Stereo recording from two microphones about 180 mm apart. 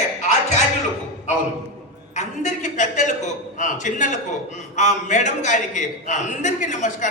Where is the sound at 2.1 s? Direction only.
40° left (ahead or behind).